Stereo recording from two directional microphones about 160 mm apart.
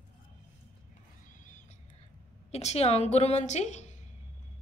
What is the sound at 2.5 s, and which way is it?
A woman's voice, 40° left (ahead or behind).